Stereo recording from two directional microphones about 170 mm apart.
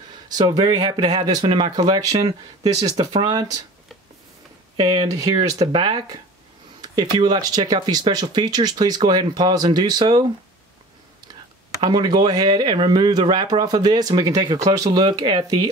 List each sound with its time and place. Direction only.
0.3 s speech: 25° right (ahead or behind)
4.7 s speech: 25° right (ahead or behind)
11.8 s speech: 25° right (ahead or behind)